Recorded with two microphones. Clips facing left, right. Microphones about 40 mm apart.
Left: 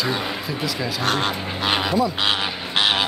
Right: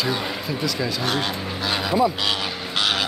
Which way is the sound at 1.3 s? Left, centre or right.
Left.